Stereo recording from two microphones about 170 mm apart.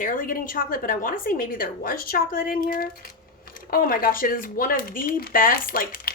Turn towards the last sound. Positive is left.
turn(degrees=60)  # may be behind; listen again after turning